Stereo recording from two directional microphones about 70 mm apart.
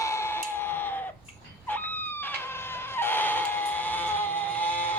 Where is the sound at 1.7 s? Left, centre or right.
Left.